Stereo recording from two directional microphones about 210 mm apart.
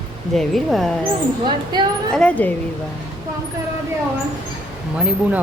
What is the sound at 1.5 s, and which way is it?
Speech, 20° right (ahead or behind).